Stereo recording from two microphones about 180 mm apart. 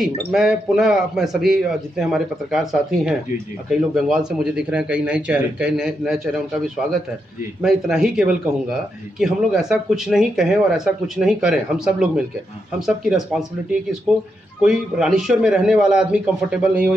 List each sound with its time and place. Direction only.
0.3 s speech: 5° right (ahead or behind)
7.6 s speech: 5° right (ahead or behind)